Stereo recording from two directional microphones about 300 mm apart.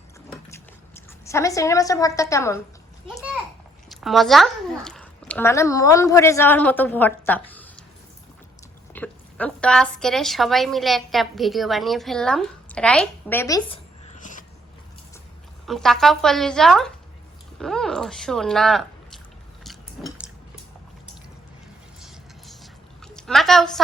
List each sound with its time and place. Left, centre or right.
0.5 s speech: centre
3.8 s a child's voice: centre
8.9 s a woman's voice: centre
14.2 s a sound: left
15.6 s a woman's voice: centre
19.6 s biting: centre
22.0 s a sound: centre